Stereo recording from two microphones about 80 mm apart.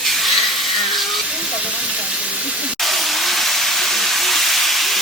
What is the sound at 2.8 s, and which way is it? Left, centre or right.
Steam, centre.